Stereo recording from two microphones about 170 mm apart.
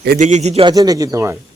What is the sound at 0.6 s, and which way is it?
Speech, 20° right (ahead or behind).